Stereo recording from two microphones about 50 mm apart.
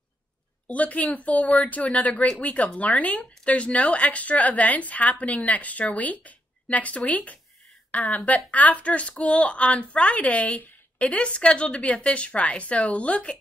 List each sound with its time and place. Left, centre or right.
0.7 s a woman's voice: left